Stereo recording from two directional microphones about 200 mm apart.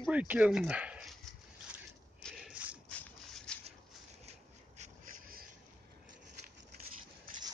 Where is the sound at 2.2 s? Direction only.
5° right (ahead or behind).